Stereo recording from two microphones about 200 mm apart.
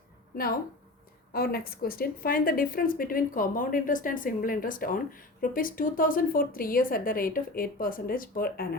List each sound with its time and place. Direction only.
1.3 s a woman's voice: 50° left (ahead or behind)